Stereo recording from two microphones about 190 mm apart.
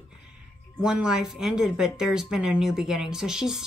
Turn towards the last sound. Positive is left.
turn(degrees=0)  # may be behind; listen again after turning